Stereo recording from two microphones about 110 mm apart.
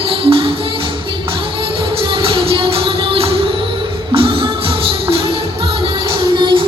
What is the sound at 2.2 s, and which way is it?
Music, 50° right (ahead or behind).